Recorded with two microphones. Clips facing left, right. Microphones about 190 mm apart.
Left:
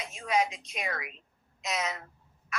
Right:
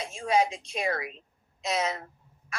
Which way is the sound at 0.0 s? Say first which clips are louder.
Right 4 dB; 30° right (ahead or behind).